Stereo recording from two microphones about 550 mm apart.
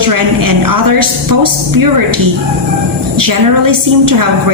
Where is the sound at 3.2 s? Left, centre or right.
Right.